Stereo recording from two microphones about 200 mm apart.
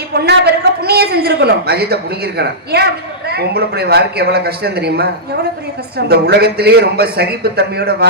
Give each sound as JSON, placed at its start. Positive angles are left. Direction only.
{"t": 0.1, "sound": "a man's voice", "side_deg": -55}